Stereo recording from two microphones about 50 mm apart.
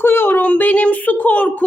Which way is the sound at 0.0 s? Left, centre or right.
Left.